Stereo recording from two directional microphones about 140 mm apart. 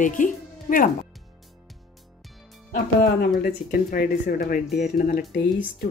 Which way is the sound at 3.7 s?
90° left.